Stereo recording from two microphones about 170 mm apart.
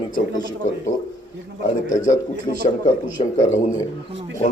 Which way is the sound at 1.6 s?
50° left (ahead or behind).